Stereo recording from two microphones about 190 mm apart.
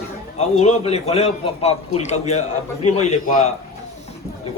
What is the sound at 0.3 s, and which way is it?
A man's voice, 35° left (ahead or behind).